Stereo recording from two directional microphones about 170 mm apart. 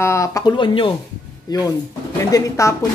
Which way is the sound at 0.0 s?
15° left (ahead or behind).